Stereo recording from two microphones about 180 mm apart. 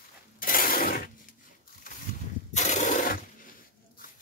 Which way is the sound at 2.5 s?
40° left (ahead or behind).